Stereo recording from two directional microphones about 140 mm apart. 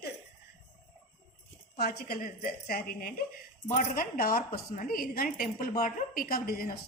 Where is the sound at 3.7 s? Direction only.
80° left.